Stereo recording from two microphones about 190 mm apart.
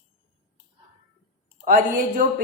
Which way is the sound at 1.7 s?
45° right (ahead or behind).